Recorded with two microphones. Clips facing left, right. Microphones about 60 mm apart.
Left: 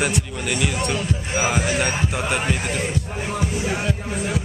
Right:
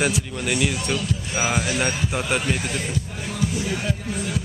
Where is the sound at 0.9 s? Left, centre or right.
Left.